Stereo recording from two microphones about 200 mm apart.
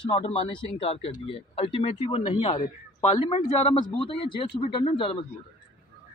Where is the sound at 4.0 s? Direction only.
25° left (ahead or behind).